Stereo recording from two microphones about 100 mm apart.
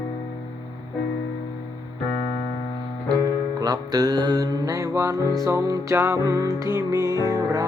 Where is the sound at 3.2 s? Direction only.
40° right (ahead or behind).